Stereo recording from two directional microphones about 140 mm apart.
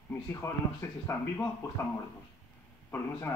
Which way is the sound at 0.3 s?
20° left (ahead or behind).